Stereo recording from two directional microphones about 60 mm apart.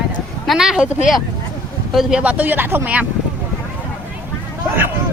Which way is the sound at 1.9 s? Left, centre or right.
Centre.